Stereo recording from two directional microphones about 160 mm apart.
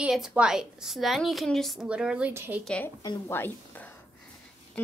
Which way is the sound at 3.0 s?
20° left (ahead or behind).